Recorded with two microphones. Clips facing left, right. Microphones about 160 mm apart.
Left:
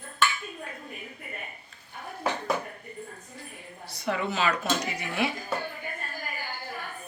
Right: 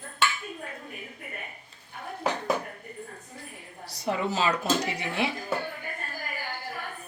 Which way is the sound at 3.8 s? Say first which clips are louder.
Right 1 dB; 35° right (ahead or behind).